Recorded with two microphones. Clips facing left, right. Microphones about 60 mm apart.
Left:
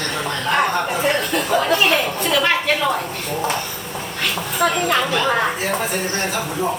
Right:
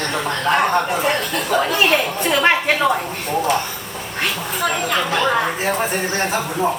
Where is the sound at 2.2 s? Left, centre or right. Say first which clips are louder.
Right 3 dB; right.